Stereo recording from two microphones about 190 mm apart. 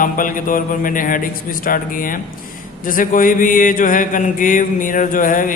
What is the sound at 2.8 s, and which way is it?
Mantra, 45° left (ahead or behind).